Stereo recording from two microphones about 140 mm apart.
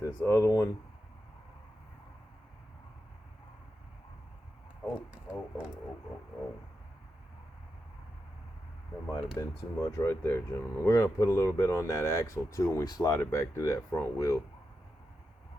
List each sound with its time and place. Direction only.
0.0 s speech: 20° left (ahead or behind)
5.1 s speech: 10° right (ahead or behind)
9.1 s speech: 25° left (ahead or behind)